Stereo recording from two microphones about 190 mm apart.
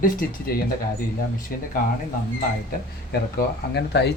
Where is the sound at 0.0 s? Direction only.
50° left (ahead or behind).